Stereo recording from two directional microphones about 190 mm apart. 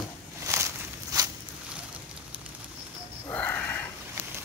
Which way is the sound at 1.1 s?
20° right (ahead or behind).